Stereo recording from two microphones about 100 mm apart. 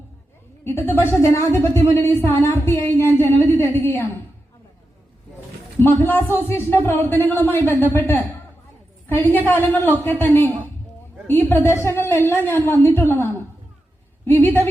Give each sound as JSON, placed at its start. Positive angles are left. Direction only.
{"t": 0.6, "sound": "a woman's voice", "side_deg": 20}
{"t": 5.8, "sound": "a woman's voice", "side_deg": 20}